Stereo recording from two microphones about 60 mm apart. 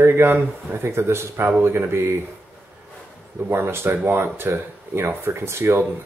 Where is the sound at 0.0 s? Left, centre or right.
Right.